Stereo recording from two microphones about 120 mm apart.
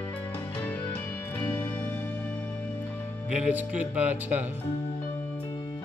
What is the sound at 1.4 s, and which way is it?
Music, 15° left (ahead or behind).